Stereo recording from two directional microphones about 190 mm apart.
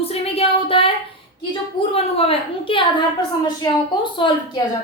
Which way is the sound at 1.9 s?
30° left (ahead or behind).